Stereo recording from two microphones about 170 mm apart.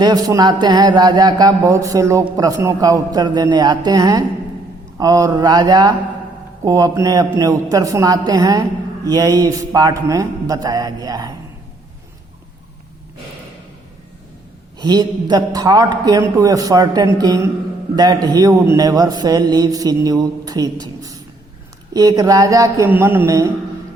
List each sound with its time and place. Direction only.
0.0 s a man's voice: 25° right (ahead or behind)
14.8 s a man's voice: 25° right (ahead or behind)